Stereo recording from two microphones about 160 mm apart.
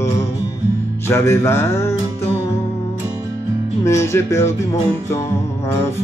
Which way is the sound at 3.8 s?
15° left (ahead or behind).